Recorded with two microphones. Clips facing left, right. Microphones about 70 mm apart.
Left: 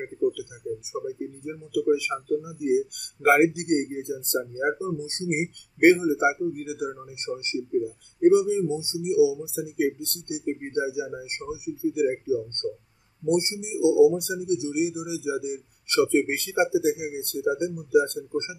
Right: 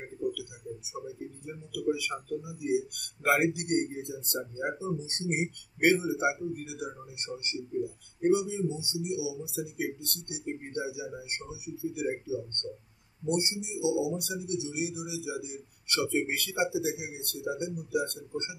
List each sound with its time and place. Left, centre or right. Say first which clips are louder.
1.0 s speech: left 8 dB; left